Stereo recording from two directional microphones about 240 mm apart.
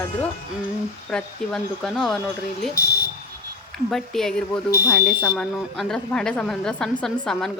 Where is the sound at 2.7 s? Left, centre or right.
Left.